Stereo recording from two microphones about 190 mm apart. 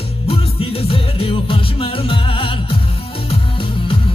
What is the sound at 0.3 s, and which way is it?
Music, 30° left (ahead or behind).